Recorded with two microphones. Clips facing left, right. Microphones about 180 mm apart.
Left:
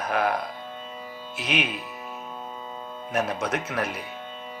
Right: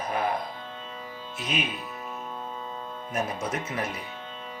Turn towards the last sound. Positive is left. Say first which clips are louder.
# left 3 dB
turn(degrees=70)  # may be behind; listen again after turning